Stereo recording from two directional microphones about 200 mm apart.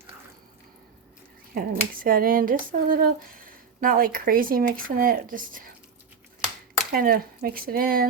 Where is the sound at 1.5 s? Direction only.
45° right (ahead or behind).